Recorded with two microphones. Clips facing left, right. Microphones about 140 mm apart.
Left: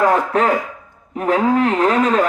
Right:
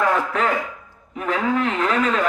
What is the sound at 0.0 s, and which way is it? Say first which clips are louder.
A man's voice: left 5 dB; 40° left (ahead or behind).